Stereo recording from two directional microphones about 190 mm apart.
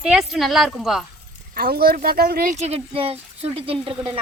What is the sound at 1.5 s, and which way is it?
Speech, 55° right (ahead or behind).